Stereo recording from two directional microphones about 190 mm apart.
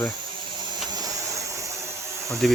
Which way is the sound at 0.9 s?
20° right (ahead or behind).